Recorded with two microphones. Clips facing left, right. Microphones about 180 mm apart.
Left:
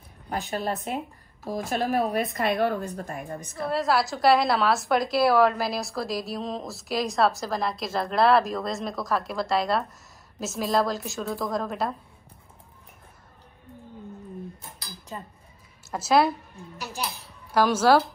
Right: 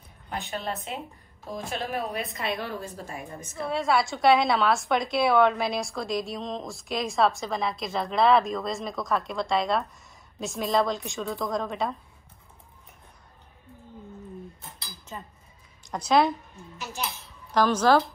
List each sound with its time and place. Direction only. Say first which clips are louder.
0.5 s speech: left 5 dB; 40° left (ahead or behind)
2.0 s a woman's voice: left 5 dB; 50° left (ahead or behind)
3.6 s a woman's voice: left 1 dB; centre (ahead or behind)
15.8 s a woman's voice: left 1 dB; 5° left (ahead or behind)